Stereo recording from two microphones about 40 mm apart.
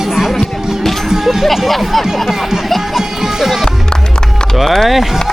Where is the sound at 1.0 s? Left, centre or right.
Centre.